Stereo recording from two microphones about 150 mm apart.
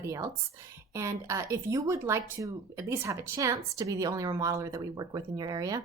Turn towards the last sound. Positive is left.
turn(degrees=-25)  # may be behind; listen again after turning